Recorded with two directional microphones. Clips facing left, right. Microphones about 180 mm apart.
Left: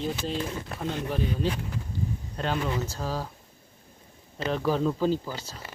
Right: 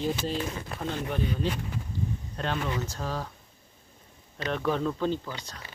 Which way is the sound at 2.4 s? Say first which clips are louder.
Left 2 dB; 5° left (ahead or behind).